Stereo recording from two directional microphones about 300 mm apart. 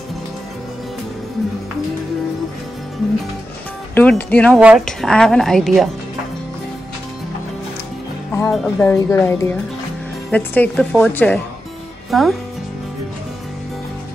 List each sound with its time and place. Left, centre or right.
3.9 s a woman's voice: centre
8.4 s a woman's voice: centre